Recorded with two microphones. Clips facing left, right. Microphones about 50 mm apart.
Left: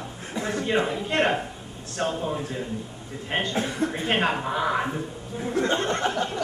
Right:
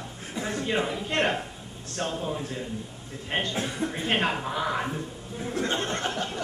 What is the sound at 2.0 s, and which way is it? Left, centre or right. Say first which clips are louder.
A man's voice: left 3 dB; centre.